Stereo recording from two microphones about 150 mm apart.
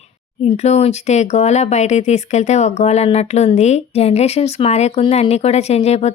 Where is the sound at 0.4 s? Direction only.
50° left (ahead or behind).